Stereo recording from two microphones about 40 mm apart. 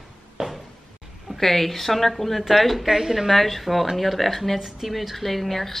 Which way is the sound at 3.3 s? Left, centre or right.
Centre.